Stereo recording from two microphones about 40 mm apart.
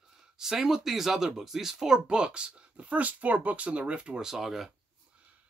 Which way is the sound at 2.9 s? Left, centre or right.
Right.